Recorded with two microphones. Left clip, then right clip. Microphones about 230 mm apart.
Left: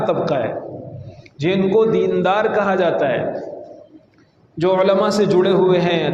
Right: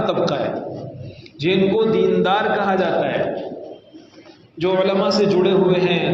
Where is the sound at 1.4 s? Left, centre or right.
Left.